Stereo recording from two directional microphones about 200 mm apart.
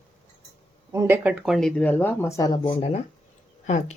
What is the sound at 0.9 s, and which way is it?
A woman's voice, 10° right (ahead or behind).